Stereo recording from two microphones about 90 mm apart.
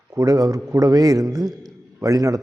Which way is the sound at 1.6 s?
40° right (ahead or behind).